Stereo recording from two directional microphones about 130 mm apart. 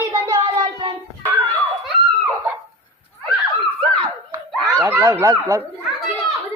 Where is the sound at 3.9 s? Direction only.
40° right (ahead or behind).